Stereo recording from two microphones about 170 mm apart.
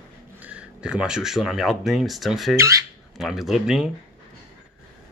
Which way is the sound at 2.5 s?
15° right (ahead or behind).